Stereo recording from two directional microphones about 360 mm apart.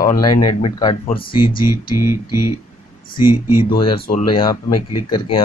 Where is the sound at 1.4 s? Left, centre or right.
Left.